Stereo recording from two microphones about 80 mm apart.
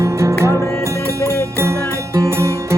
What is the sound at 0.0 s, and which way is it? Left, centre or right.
Music, right.